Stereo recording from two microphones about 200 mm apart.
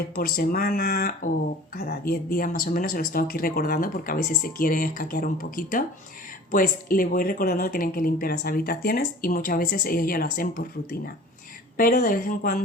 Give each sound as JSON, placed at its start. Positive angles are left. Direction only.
{"t": 0.2, "sound": "speech", "side_deg": 50}